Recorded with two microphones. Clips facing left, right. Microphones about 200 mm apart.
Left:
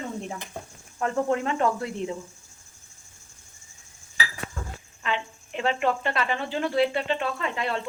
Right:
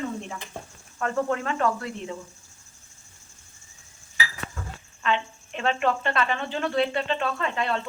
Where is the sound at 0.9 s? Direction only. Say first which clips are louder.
Left 1 dB; 20° left (ahead or behind).